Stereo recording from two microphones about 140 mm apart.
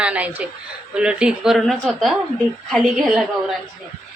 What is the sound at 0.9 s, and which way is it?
A woman's voice, 5° right (ahead or behind).